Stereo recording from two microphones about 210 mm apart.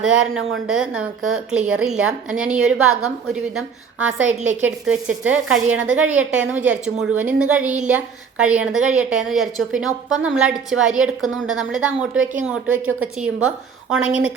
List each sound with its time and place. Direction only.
0.0 s a woman's voice: 5° right (ahead or behind)
2.7 s a woman's voice: 90° right
4.6 s a woman's voice: 5° right (ahead or behind)
5.8 s a woman's voice: 65° right (ahead or behind)
6.1 s a woman's voice: 10° right (ahead or behind)